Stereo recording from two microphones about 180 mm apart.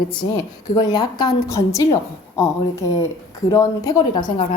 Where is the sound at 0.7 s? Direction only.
25° left (ahead or behind).